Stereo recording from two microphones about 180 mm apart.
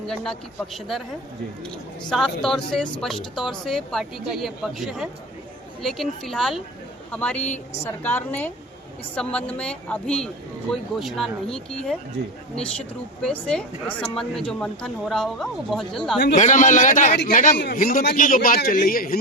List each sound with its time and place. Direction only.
0.1 s speech: centre (ahead or behind)
2.0 s a woman's voice: 5° left (ahead or behind)
13.2 s speech: 5° left (ahead or behind)
16.3 s a man's voice: 45° left (ahead or behind)
17.6 s a man's voice: 55° left (ahead or behind)